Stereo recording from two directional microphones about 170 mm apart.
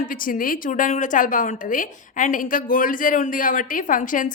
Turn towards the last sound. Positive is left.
turn(degrees=50)  # may be behind; listen again after turning